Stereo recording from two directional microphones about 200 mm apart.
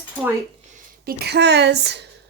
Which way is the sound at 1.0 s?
55° right (ahead or behind).